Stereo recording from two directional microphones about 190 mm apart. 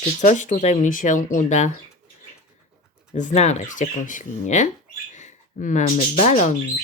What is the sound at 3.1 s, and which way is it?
Speech, 40° left (ahead or behind).